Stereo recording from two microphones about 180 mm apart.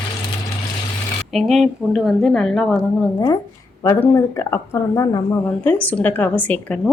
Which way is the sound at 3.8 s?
15° left (ahead or behind).